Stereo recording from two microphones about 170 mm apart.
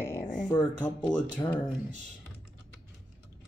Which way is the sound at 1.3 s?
10° left (ahead or behind).